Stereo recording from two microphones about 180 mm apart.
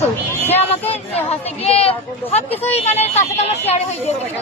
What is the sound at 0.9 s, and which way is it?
Speech, 35° left (ahead or behind).